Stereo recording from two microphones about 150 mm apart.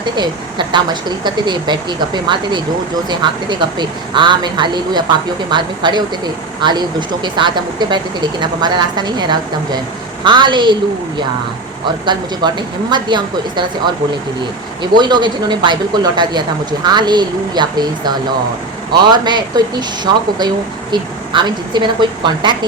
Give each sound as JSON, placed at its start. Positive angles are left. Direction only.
{"t": 0.0, "sound": "speech", "side_deg": -30}
{"t": 11.9, "sound": "speech", "side_deg": -30}
{"t": 20.9, "sound": "speech", "side_deg": -30}